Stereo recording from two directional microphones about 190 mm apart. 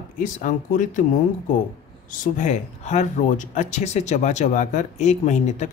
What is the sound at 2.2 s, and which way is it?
Speech, 40° left (ahead or behind).